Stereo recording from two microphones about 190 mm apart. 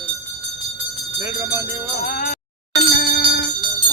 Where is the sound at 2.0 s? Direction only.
45° left (ahead or behind).